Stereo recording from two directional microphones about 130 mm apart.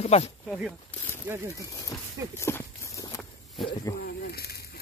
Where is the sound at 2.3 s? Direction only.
20° left (ahead or behind).